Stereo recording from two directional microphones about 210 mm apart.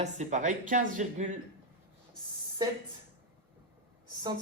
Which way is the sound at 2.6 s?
20° right (ahead or behind).